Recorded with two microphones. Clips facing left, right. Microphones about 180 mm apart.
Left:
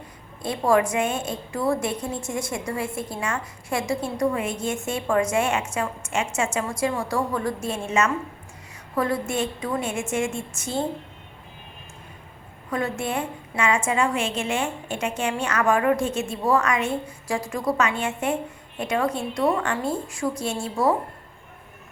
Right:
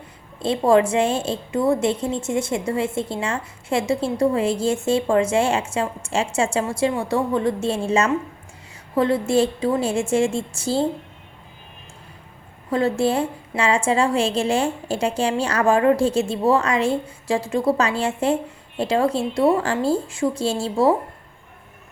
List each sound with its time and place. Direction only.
0.3 s a woman's voice: 25° right (ahead or behind)
12.7 s a woman's voice: 30° right (ahead or behind)